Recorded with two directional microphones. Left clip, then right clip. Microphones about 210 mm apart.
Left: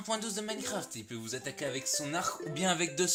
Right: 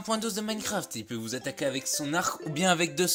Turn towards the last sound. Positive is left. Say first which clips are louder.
# right 5 dB
turn(degrees=-30)  # may be behind; listen again after turning